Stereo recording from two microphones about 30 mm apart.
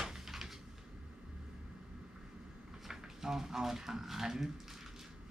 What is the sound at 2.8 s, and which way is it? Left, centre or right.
Speech, centre.